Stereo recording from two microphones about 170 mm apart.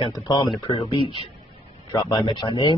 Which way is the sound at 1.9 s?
20° left (ahead or behind).